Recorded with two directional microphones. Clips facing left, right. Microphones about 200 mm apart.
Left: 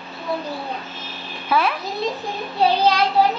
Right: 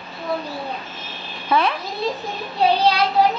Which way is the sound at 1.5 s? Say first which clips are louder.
Right 1 dB; 5° left (ahead or behind).